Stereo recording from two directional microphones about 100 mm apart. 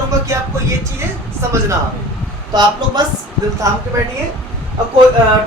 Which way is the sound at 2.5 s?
45° right (ahead or behind).